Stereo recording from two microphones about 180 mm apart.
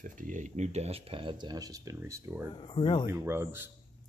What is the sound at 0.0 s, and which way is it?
Speech, 45° right (ahead or behind).